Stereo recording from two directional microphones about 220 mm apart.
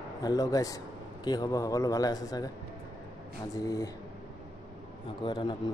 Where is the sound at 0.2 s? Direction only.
15° left (ahead or behind).